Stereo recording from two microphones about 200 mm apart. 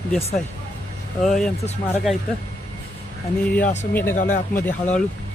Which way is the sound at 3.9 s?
10° left (ahead or behind).